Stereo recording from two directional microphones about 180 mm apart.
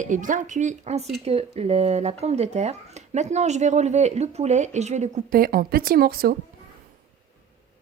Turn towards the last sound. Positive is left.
turn(degrees=-55)  # may be behind; listen again after turning